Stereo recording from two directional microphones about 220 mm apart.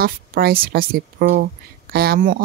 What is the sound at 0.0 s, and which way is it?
Speech, 40° right (ahead or behind).